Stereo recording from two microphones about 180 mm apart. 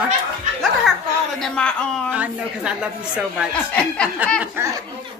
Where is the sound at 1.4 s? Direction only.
5° left (ahead or behind).